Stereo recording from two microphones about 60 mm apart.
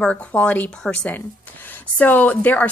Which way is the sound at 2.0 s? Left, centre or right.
Left.